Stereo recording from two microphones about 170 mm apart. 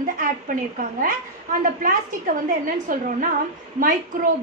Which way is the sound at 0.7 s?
50° right (ahead or behind).